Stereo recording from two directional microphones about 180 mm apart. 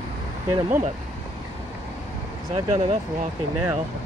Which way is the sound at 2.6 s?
35° right (ahead or behind).